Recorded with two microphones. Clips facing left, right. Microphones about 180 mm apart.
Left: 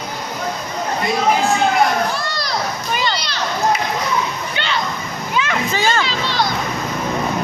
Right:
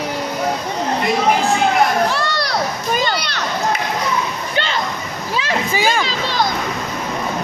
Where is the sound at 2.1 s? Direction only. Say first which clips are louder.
Right 3 dB; 70° right (ahead or behind).